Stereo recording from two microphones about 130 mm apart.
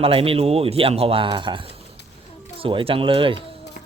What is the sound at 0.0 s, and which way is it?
Speech, 45° right (ahead or behind).